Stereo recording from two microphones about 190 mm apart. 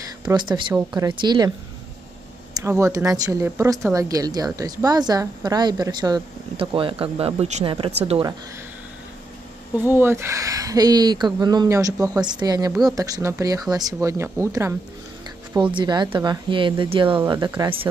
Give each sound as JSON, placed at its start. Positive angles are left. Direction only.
{"t": 0.2, "sound": "a woman's voice", "side_deg": -20}
{"t": 2.5, "sound": "a woman's voice", "side_deg": -15}
{"t": 9.8, "sound": "a woman's voice", "side_deg": -10}
{"t": 15.5, "sound": "a woman's voice", "side_deg": -25}